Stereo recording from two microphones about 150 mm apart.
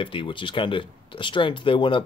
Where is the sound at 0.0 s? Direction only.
35° left (ahead or behind).